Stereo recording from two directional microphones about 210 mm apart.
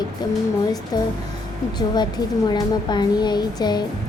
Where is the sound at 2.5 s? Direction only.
20° left (ahead or behind).